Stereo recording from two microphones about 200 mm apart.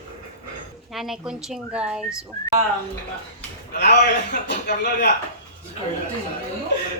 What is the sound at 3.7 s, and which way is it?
A man's voice, 50° left (ahead or behind).